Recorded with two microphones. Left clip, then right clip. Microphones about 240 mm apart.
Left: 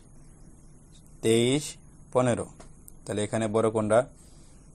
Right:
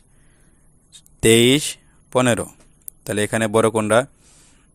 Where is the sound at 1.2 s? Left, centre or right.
Right.